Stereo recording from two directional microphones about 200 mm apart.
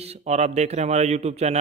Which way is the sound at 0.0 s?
30° right (ahead or behind).